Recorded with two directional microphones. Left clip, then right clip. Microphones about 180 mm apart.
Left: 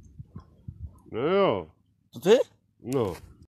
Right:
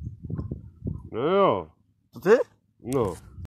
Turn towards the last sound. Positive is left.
turn(degrees=-5)  # may be behind; listen again after turning